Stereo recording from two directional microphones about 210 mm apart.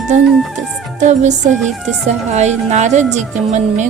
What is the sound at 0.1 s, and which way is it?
Speech, 35° right (ahead or behind).